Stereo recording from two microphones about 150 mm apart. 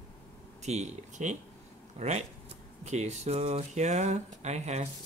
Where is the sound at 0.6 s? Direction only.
50° right (ahead or behind).